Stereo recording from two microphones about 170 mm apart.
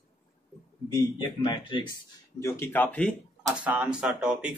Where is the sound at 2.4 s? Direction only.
10° left (ahead or behind).